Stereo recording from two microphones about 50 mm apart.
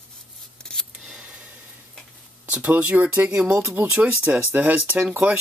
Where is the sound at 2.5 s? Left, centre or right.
Right.